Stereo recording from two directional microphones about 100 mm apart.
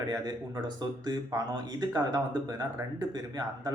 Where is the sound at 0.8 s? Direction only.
45° right (ahead or behind).